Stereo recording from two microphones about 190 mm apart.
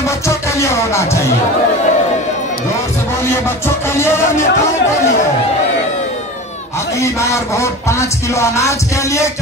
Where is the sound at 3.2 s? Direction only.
15° left (ahead or behind).